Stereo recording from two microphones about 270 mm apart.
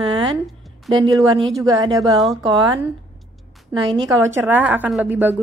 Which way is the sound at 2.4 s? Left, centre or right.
Centre.